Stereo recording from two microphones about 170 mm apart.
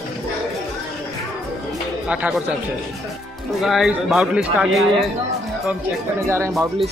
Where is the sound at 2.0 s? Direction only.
5° right (ahead or behind).